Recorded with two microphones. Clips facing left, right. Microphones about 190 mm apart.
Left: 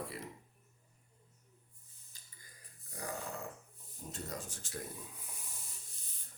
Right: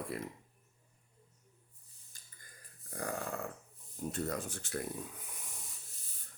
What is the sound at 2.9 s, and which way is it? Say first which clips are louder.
Grunt: right 4 dB; 55° right (ahead or behind).